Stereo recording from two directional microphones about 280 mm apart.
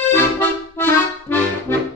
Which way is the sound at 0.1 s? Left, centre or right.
Centre.